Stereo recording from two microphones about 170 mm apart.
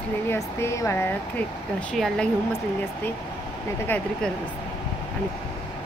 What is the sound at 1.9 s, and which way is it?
Speech, centre (ahead or behind).